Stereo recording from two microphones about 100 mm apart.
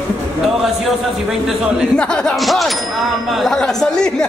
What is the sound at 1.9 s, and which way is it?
Speech, 10° left (ahead or behind).